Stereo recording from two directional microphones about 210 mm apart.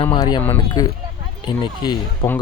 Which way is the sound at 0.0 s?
20° left (ahead or behind).